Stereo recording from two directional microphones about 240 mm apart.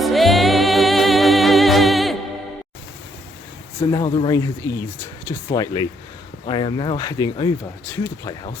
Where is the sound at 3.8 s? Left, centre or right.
Centre.